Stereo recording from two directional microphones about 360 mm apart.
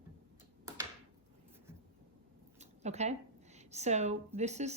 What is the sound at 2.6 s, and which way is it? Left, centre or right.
A woman's voice, centre.